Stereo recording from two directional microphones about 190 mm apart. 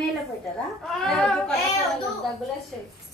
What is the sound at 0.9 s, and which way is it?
Speech, 5° left (ahead or behind).